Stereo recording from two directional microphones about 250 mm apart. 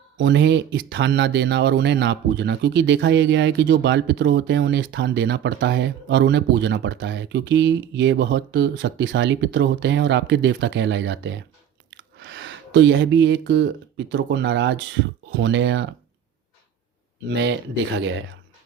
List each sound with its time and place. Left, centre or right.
0.2 s speech: right
17.2 s speech: right